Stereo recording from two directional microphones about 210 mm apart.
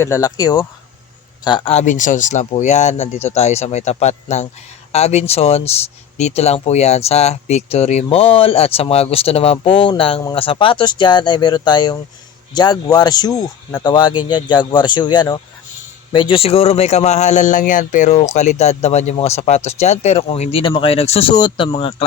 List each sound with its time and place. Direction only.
0.0 s speech: 15° left (ahead or behind)